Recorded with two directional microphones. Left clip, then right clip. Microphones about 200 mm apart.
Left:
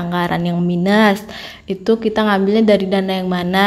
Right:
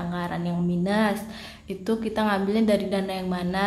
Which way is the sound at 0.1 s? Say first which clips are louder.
Left 14 dB; 40° left (ahead or behind).